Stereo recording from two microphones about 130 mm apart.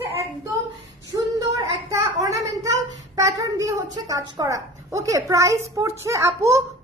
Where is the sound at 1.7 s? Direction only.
25° right (ahead or behind).